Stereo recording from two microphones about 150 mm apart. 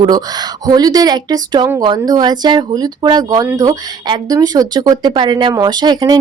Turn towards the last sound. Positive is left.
turn(degrees=-25)  # may be behind; listen again after turning